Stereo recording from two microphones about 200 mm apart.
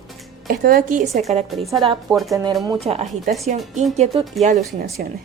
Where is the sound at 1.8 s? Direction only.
25° right (ahead or behind).